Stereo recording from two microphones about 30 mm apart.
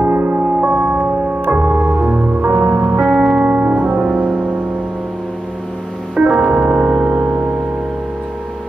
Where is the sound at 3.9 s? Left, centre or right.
Right.